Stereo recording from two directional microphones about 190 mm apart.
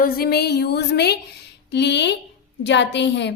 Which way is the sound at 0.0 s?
50° left (ahead or behind).